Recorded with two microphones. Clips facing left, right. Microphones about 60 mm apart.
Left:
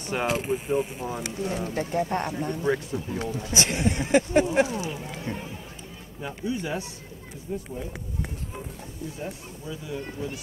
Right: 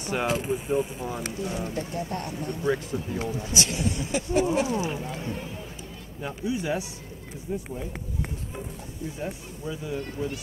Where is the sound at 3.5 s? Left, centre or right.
Left.